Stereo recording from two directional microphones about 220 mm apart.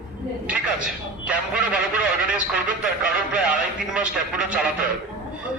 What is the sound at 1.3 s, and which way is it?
A man's voice, 5° right (ahead or behind).